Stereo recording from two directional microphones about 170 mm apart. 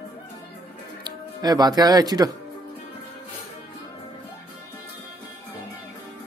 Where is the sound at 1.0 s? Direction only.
25° right (ahead or behind).